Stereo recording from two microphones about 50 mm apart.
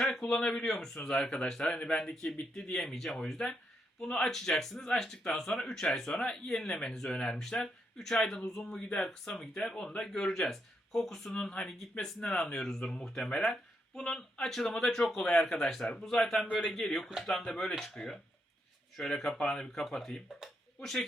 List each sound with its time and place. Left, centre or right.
0.2 s speech: left
7.1 s speech: left
7.9 s speech: centre
9.3 s speech: centre
12.3 s speech: left
12.5 s speech: centre